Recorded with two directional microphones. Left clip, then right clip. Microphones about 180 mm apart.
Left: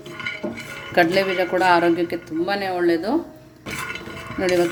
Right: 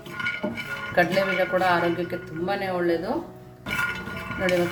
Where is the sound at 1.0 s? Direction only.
40° left (ahead or behind).